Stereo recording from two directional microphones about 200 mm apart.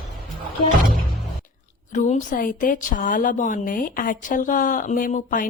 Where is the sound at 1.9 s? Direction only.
40° left (ahead or behind).